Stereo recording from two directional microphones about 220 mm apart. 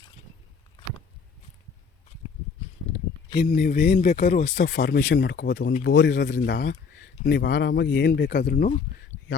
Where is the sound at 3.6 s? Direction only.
45° left (ahead or behind).